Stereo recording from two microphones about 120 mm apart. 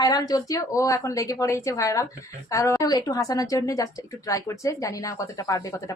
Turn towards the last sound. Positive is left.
turn(degrees=25)  # may be behind; listen again after turning